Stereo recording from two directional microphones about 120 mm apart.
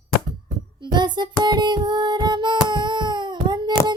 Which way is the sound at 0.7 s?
40° right (ahead or behind).